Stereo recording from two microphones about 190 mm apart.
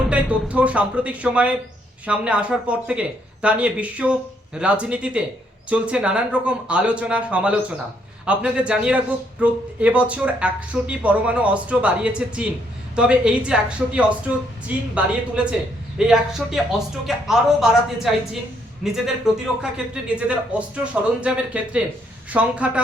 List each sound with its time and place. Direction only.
0.1 s a man's voice: 5° right (ahead or behind)
16.0 s a man's voice: 5° right (ahead or behind)